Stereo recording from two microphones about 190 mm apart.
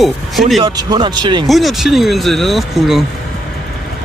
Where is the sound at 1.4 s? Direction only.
Centre (ahead or behind).